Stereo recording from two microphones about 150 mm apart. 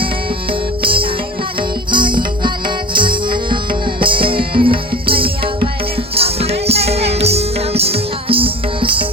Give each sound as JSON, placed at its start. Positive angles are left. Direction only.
{"t": 0.8, "sound": "music", "side_deg": -35}